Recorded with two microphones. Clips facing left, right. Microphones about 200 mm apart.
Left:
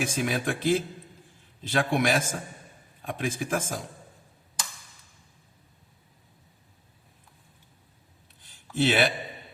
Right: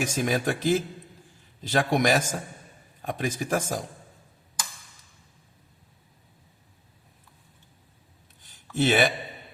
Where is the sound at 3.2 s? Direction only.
40° right (ahead or behind).